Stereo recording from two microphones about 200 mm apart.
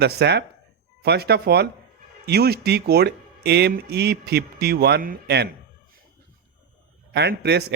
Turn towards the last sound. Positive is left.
turn(degrees=-55)  # may be behind; listen again after turning